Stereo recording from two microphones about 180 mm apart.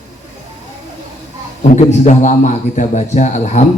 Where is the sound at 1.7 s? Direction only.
40° left (ahead or behind).